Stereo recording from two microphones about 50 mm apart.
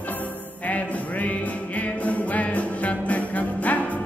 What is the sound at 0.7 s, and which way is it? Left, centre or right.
Music, left.